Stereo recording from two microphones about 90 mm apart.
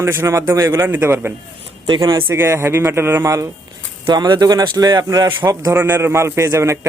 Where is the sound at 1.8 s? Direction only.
55° right (ahead or behind).